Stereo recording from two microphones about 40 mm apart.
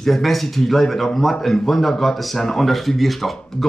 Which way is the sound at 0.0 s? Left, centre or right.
Centre.